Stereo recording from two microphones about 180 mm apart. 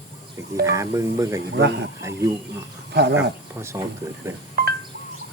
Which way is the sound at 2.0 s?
15° right (ahead or behind).